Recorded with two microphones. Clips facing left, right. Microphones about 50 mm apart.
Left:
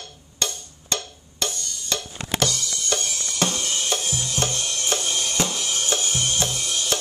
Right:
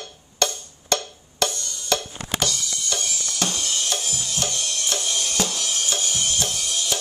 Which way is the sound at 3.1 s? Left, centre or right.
Left.